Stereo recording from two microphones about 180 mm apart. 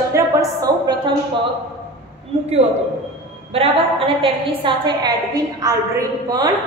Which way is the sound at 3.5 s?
30° right (ahead or behind).